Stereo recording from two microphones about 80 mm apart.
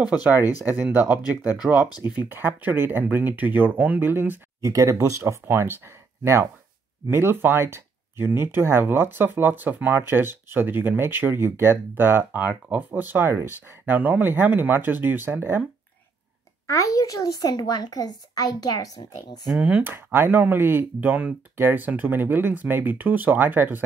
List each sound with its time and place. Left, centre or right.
0.0 s speech: centre
1.9 s speech: left
2.1 s speech: right
4.6 s speech: right
16.6 s speech: left
19.8 s speech: right